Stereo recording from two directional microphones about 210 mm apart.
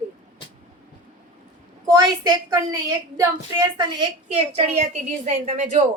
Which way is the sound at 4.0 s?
30° right (ahead or behind).